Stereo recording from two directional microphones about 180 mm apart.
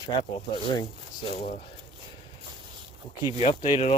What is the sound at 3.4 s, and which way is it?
Speech, 30° left (ahead or behind).